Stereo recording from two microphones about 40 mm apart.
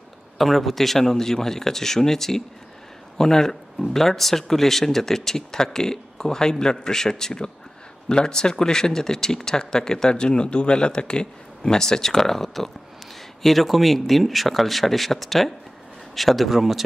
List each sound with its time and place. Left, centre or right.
0.4 s speech: centre